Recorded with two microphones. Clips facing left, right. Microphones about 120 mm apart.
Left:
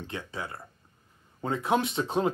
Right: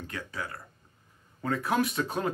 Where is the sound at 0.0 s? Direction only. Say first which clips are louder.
Left 1 dB; 25° left (ahead or behind).